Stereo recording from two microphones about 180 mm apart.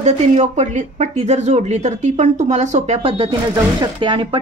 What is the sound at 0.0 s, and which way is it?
Speech, 40° right (ahead or behind).